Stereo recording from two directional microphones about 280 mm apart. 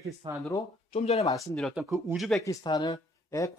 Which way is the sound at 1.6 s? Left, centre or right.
Centre.